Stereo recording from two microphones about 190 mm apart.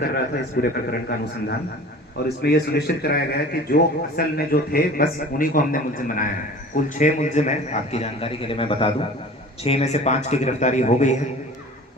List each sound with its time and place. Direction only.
0.0 s a man's voice: 55° left (ahead or behind); by 11.1 s 40° left (ahead or behind)